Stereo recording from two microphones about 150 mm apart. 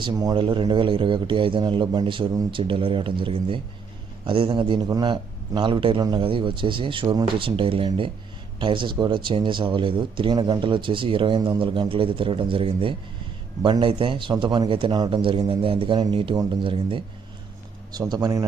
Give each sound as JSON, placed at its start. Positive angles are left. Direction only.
{"t": 0.0, "sound": "speech", "side_deg": -30}